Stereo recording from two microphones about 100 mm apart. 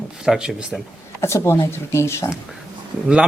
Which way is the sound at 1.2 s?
25° left (ahead or behind).